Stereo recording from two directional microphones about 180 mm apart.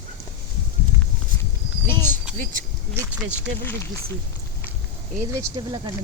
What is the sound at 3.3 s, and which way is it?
Speech, 10° left (ahead or behind).